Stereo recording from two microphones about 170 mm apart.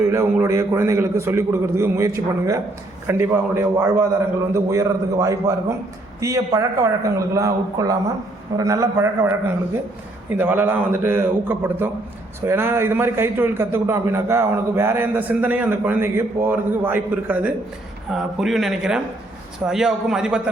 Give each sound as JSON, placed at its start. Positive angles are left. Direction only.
{"t": 0.0, "sound": "a man's voice", "side_deg": -15}